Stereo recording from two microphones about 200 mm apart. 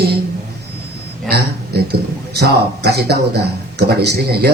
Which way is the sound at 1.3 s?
55° right (ahead or behind).